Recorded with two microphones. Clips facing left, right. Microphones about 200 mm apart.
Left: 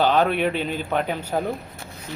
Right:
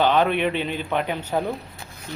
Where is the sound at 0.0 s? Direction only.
10° left (ahead or behind).